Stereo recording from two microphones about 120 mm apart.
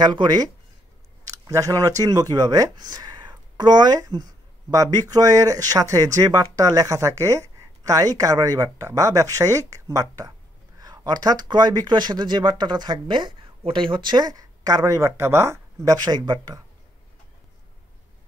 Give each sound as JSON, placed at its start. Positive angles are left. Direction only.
{"t": 0.0, "sound": "speech", "side_deg": -40}
{"t": 1.2, "sound": "speech", "side_deg": -25}